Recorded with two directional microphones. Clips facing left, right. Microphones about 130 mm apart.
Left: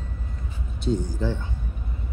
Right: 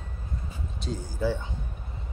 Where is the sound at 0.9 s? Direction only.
5° left (ahead or behind).